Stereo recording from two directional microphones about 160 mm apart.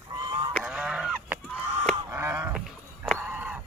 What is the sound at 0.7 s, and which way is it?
Goose, 5° right (ahead or behind).